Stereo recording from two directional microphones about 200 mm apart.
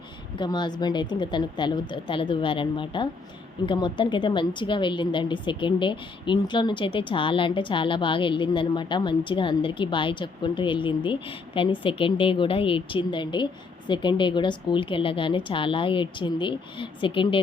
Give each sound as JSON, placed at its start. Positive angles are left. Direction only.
{"t": 0.3, "sound": "a woman's voice", "side_deg": 20}